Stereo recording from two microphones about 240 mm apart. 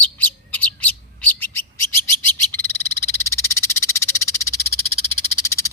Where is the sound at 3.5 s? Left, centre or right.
Centre.